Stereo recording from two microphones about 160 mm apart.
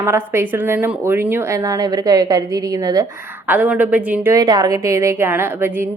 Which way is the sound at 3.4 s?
10° right (ahead or behind).